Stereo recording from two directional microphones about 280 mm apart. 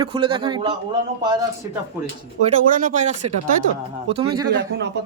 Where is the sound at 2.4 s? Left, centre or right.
Right.